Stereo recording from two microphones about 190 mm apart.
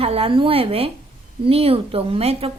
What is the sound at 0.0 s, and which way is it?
A woman's voice, 30° right (ahead or behind).